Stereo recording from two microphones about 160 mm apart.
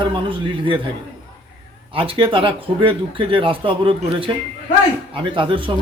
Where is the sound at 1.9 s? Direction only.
35° right (ahead or behind).